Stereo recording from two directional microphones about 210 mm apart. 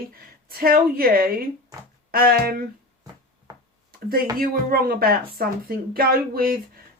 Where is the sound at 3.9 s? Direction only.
45° right (ahead or behind).